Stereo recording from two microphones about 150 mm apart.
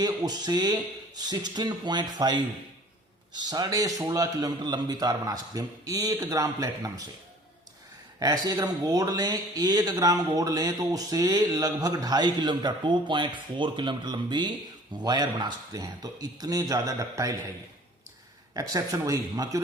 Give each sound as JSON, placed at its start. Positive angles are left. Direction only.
{"t": 0.0, "sound": "speech", "side_deg": -30}
{"t": 3.4, "sound": "speech", "side_deg": -25}
{"t": 8.2, "sound": "speech", "side_deg": -25}
{"t": 18.5, "sound": "speech", "side_deg": -25}